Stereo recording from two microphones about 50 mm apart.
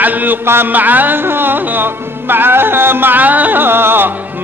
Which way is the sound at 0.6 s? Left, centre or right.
Right.